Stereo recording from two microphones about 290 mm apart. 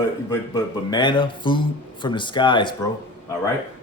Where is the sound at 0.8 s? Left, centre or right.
Centre.